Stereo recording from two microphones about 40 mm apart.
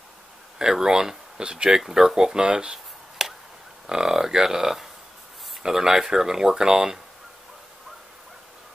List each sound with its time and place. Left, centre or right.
0.6 s speech: centre
2.4 s a sound: right
3.8 s speech: centre